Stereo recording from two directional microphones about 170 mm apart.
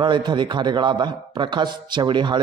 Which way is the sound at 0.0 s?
25° right (ahead or behind).